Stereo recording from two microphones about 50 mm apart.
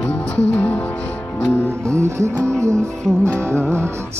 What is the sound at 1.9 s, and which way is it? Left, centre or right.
Music, right.